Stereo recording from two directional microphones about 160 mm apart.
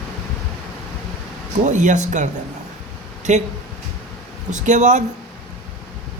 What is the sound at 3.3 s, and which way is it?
Speech, 45° right (ahead or behind).